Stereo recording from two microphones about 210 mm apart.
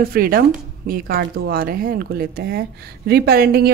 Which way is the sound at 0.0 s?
45° right (ahead or behind).